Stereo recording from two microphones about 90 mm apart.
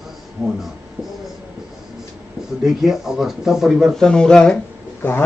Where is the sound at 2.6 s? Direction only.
5° right (ahead or behind).